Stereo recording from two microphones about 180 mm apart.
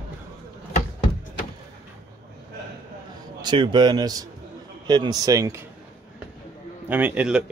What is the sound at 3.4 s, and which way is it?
Speech, 25° right (ahead or behind).